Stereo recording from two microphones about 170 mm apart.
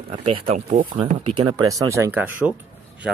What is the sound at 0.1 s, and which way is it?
Speech, 40° right (ahead or behind).